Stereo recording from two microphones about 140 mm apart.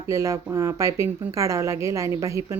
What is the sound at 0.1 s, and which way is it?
Speech, 20° right (ahead or behind).